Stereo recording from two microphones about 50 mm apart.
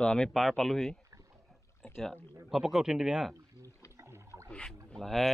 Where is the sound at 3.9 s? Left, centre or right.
Right.